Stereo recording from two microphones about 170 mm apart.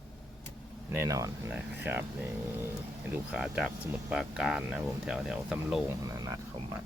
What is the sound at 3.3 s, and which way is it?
Speech, 5° right (ahead or behind).